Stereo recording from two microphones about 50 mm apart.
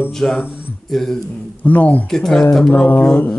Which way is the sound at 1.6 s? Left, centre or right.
Left.